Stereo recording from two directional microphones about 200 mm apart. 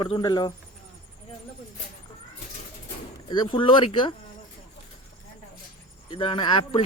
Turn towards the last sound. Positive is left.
turn(degrees=25)  # may be behind; listen again after turning